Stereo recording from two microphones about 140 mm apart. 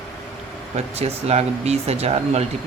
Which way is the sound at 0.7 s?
50° right (ahead or behind).